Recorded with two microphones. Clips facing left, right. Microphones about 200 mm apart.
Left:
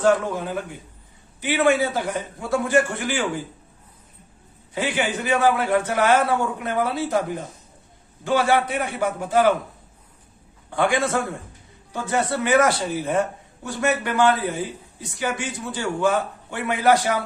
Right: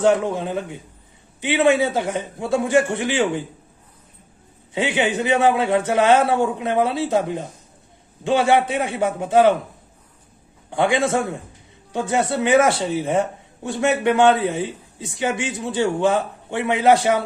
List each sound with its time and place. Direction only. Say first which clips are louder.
0.0 s speech: right 2 dB; 25° right (ahead or behind)
4.7 s speech: right 3 dB; 25° right (ahead or behind)
10.7 s speech: right 2 dB; 20° right (ahead or behind)